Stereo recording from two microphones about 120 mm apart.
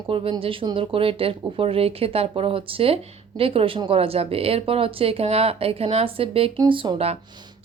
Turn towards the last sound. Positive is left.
turn(degrees=-50)  # may be behind; listen again after turning